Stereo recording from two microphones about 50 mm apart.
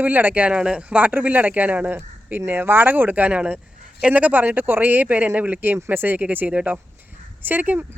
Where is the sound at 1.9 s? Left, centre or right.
Right.